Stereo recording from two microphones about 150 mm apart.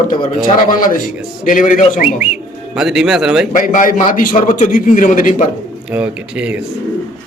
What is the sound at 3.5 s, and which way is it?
A man's voice, 60° left (ahead or behind).